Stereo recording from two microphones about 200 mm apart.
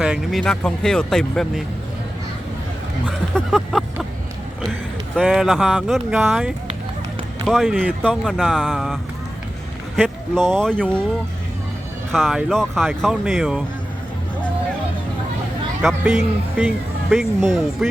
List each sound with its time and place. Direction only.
0.0 s speech: centre (ahead or behind)
3.1 s speech: centre (ahead or behind)
5.1 s speech: centre (ahead or behind)
12.1 s speech: centre (ahead or behind)
15.8 s speech: centre (ahead or behind)